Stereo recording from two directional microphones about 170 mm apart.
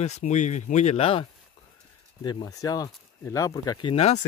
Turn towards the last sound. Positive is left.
turn(degrees=35)  # may be behind; listen again after turning